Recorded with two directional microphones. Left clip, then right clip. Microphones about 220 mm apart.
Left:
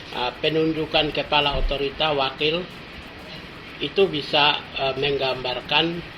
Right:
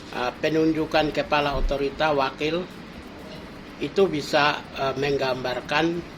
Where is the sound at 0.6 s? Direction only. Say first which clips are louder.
Even; 20° right (ahead or behind).